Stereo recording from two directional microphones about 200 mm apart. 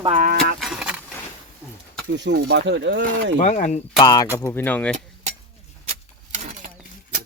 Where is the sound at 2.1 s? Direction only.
60° right (ahead or behind).